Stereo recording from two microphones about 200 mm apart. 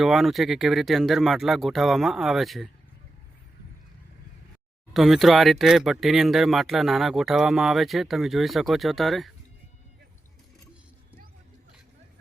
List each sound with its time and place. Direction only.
0.0 s speech: centre (ahead or behind)
4.9 s speech: centre (ahead or behind)